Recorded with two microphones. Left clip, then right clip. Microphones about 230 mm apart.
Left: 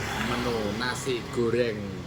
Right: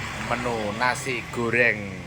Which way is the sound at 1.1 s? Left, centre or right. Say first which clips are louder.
Right 2 dB; right.